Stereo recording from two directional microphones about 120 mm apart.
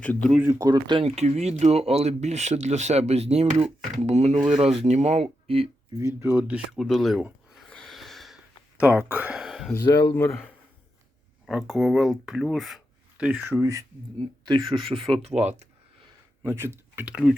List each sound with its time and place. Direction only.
0.0 s speech: 10° left (ahead or behind)
0.6 s speech: 35° right (ahead or behind)
1.0 s speech: 65° right (ahead or behind)
6.0 s speech: 25° right (ahead or behind)
6.7 s speech: centre (ahead or behind)
7.5 s snort: 5° left (ahead or behind)
8.8 s speech: 15° right (ahead or behind)
9.4 s a sound: centre (ahead or behind)
9.8 s speech: 35° left (ahead or behind)
11.4 s speech: centre (ahead or behind)
13.1 s speech: 10° right (ahead or behind)
14.4 s speech: 40° right (ahead or behind)
15.2 s speech: 65° right (ahead or behind)
16.4 s speech: 20° right (ahead or behind)